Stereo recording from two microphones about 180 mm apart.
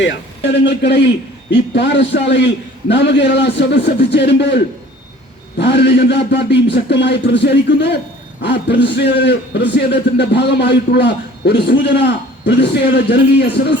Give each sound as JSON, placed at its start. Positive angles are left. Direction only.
{"t": 0.6, "sound": "a man's voice", "side_deg": 75}